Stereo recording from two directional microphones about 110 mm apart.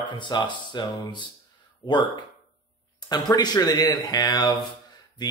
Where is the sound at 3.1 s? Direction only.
40° left (ahead or behind).